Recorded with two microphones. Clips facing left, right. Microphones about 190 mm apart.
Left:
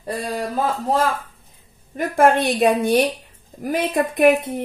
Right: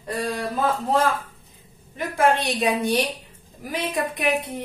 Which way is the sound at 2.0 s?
50° left (ahead or behind).